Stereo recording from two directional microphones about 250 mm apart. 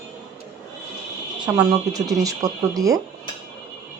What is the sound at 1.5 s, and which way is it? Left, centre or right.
Speech, centre.